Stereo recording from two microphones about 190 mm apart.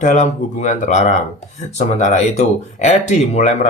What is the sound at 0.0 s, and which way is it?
Speech, 40° left (ahead or behind).